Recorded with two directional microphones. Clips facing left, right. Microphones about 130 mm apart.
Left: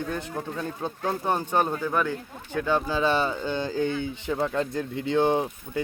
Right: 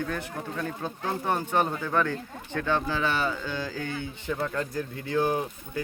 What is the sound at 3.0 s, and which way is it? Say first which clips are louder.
Speech: left 4 dB; 25° left (ahead or behind).